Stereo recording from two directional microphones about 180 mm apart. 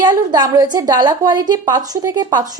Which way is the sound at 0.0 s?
25° right (ahead or behind).